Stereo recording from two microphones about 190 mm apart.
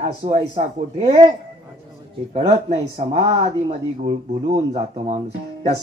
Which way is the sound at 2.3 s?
35° right (ahead or behind).